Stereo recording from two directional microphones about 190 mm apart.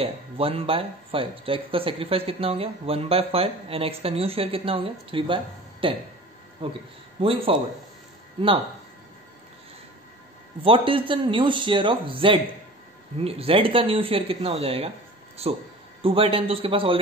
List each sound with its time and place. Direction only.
0.0 s speech: 30° right (ahead or behind)
7.2 s speech: 30° right (ahead or behind)
10.6 s speech: 30° right (ahead or behind)